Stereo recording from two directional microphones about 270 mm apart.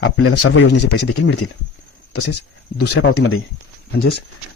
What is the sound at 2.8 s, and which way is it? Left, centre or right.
Speech, left.